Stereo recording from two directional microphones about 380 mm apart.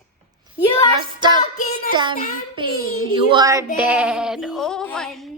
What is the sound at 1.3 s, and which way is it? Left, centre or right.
Music, centre.